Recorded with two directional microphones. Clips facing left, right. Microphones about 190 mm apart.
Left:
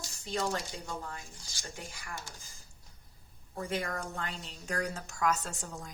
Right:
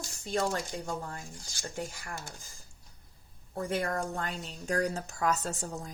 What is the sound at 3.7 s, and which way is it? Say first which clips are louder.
Speech: right 4 dB; 45° right (ahead or behind).